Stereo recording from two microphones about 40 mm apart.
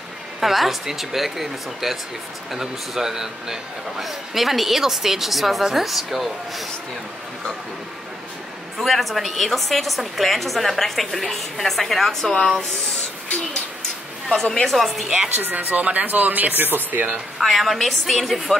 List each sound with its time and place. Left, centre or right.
0.4 s a woman's voice: centre
8.7 s a woman's voice: centre
14.3 s a woman's voice: centre
15.2 s speech: right
17.4 s a woman's voice: centre